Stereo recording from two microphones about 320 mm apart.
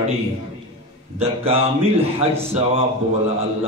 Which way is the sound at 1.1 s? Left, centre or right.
Centre.